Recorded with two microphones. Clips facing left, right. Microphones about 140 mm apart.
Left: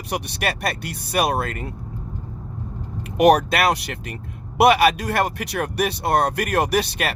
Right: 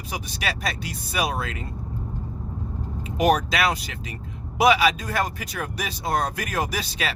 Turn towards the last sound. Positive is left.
turn(degrees=60)  # may be behind; listen again after turning